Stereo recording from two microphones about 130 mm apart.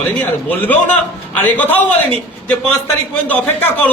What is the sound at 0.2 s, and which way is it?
A man's voice, 15° left (ahead or behind).